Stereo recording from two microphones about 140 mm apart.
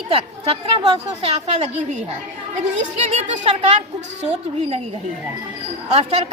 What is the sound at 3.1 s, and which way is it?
A woman's voice, 55° right (ahead or behind).